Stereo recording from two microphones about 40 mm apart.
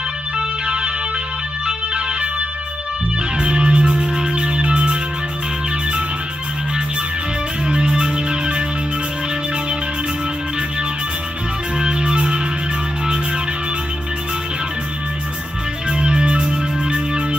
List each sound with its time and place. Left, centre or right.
0.4 s music: right
3.3 s music: right
7.6 s music: right
11.8 s music: right
15.9 s music: right